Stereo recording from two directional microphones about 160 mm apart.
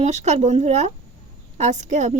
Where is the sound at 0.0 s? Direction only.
45° right (ahead or behind).